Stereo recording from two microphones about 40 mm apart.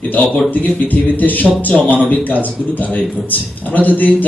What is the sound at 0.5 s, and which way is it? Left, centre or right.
A man's voice, left.